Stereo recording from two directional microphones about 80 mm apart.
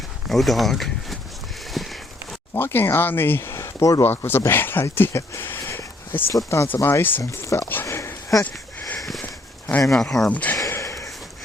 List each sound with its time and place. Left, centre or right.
0.3 s speech: centre
1.8 s walk: centre
2.6 s speech: left
5.6 s a sound: left
6.3 s speech: left
6.8 s speech: left
7.2 s speech: left
7.7 s sniff: left
9.2 s a sound: left
9.9 s speech: centre
10.3 s speech: centre
10.7 s sniff: left